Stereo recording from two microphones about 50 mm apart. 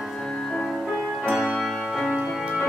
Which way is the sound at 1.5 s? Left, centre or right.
Centre.